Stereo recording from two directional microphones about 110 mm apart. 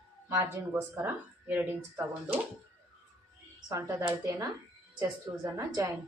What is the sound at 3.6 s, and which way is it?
Speech, 30° right (ahead or behind).